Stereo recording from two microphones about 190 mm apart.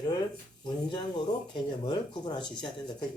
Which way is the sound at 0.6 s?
25° left (ahead or behind).